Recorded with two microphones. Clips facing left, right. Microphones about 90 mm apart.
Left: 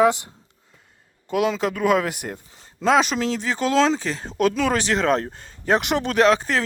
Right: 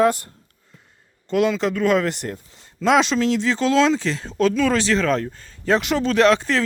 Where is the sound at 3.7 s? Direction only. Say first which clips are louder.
Right 1 dB; 30° left (ahead or behind).